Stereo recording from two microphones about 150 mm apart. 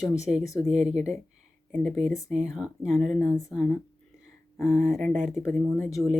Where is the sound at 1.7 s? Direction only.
Centre (ahead or behind).